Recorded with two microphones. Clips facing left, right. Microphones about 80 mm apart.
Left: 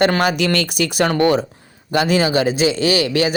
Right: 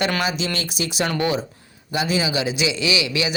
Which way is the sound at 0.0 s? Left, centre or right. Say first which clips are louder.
Left 7 dB; left.